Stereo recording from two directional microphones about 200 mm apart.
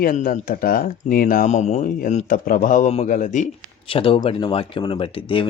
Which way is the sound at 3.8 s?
25° left (ahead or behind).